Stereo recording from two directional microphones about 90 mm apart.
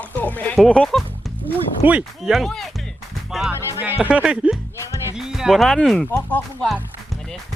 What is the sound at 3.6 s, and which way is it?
Speech, 25° right (ahead or behind).